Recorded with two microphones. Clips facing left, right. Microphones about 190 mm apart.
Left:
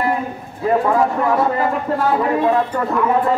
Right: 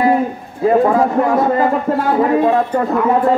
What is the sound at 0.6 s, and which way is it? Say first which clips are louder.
A man's voice: right 4 dB; 45° right (ahead or behind).